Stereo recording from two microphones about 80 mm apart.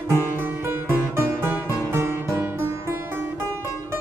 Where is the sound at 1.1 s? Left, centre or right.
Right.